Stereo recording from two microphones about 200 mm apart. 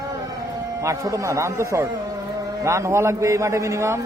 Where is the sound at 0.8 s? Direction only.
15° right (ahead or behind).